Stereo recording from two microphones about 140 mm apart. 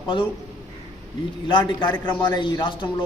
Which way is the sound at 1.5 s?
35° left (ahead or behind).